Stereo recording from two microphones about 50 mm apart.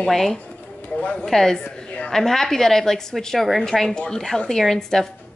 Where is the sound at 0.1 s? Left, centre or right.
Centre.